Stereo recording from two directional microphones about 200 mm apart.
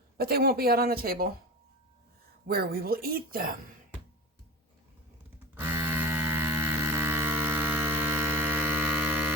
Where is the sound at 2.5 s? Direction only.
50° right (ahead or behind).